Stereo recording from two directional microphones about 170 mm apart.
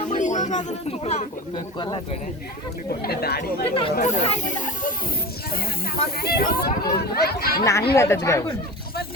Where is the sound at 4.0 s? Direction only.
45° left (ahead or behind).